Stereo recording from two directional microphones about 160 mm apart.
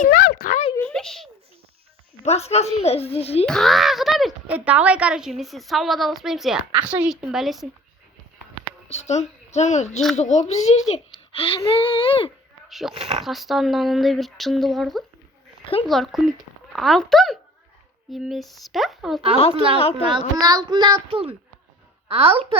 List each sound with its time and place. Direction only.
0.0 s a sound: 60° left (ahead or behind)
0.8 s a sound: 5° left (ahead or behind)
2.2 s a woman's voice: 40° left (ahead or behind)
3.4 s speech: 5° left (ahead or behind)
8.9 s a woman's voice: 45° left (ahead or behind)
12.6 s a sound: centre (ahead or behind)
12.9 s a woman's voice: 35° right (ahead or behind)
13.2 s speech: centre (ahead or behind)
20.1 s a child's voice: 25° right (ahead or behind)